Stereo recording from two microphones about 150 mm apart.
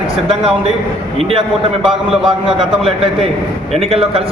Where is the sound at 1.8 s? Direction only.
5° right (ahead or behind).